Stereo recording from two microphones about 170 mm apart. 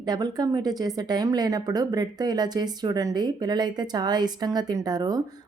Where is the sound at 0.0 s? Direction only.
25° right (ahead or behind).